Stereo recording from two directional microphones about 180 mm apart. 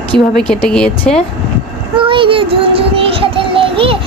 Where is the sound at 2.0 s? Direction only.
30° right (ahead or behind).